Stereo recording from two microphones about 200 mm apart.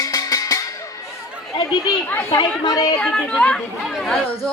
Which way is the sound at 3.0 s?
5° left (ahead or behind).